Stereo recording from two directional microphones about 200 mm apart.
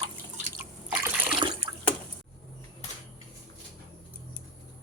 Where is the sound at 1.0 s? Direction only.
5° right (ahead or behind).